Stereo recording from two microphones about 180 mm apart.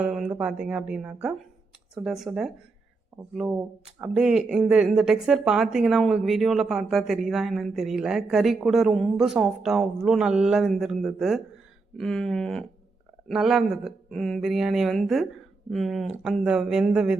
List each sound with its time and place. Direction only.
0.0 s a woman's voice: 5° right (ahead or behind)
4.0 s a woman's voice: 5° right (ahead or behind)